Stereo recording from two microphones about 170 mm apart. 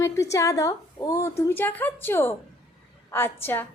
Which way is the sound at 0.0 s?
15° left (ahead or behind).